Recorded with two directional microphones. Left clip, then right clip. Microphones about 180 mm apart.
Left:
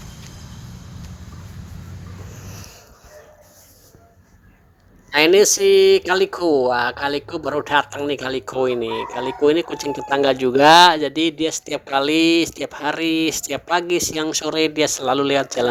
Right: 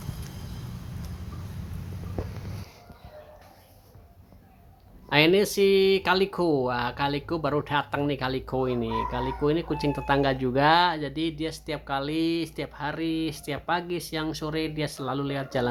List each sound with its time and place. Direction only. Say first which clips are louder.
5.0 s speech: left 8 dB; 35° left (ahead or behind)